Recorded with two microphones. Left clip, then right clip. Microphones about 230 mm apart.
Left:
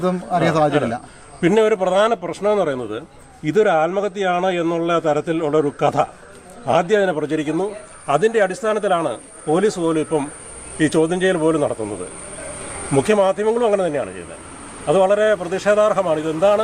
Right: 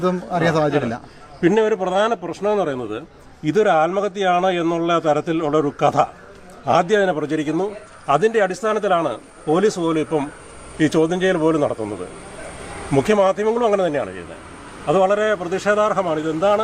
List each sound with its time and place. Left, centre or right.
0.0 s a man's voice: centre
1.4 s a man's voice: left; by 3.0 s centre
3.4 s a man's voice: centre
12.9 s a man's voice: centre